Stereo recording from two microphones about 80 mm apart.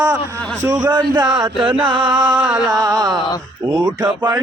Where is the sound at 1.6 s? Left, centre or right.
Right.